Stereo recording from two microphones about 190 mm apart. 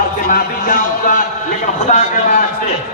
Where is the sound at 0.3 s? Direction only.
45° left (ahead or behind).